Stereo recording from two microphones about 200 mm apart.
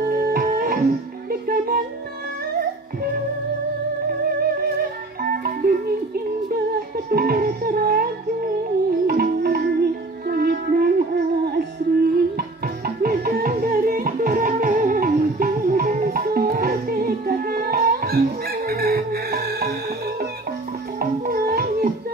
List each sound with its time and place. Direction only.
0.2 s music: 45° right (ahead or behind)
5.3 s music: 45° right (ahead or behind)
21.0 s music: 45° right (ahead or behind)